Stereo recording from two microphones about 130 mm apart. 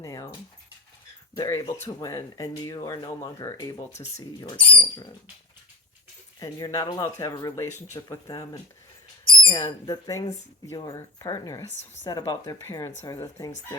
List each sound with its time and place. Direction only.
0.0 s speech: 25° left (ahead or behind)
1.4 s speech: 25° left (ahead or behind)
4.6 s speech: 15° left (ahead or behind)
6.4 s speech: 25° left (ahead or behind)
9.8 s speech: 30° left (ahead or behind)